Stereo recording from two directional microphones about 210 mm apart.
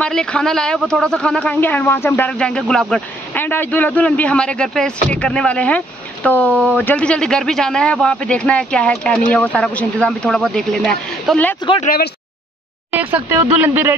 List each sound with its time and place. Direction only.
0.0 s speech: 5° left (ahead or behind)
11.8 s speech: 45° left (ahead or behind)
12.9 s speech: 10° right (ahead or behind)